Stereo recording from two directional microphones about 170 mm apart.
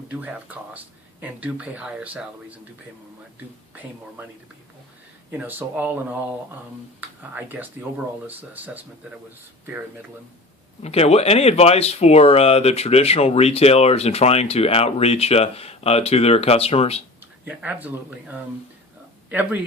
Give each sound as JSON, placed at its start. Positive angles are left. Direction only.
{"t": 0.1, "sound": "speech", "side_deg": -10}
{"t": 5.3, "sound": "speech", "side_deg": -10}
{"t": 10.8, "sound": "speech", "side_deg": 35}
{"t": 17.4, "sound": "speech", "side_deg": -10}